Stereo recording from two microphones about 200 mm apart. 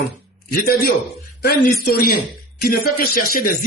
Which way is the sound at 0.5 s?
50° left (ahead or behind).